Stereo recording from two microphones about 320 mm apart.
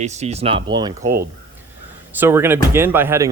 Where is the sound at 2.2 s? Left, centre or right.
Centre.